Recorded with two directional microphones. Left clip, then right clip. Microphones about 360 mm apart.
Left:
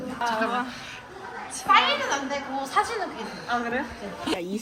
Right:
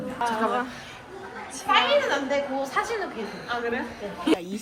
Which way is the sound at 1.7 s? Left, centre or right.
Centre.